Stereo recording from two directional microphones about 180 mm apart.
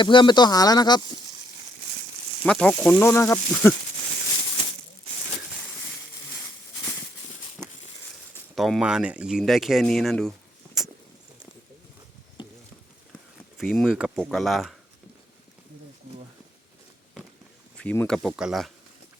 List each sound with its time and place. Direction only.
0.0 s speech: 25° left (ahead or behind)
2.4 s speech: 5° left (ahead or behind)
8.5 s speech: centre (ahead or behind)
13.6 s speech: centre (ahead or behind)
17.7 s speech: 5° left (ahead or behind)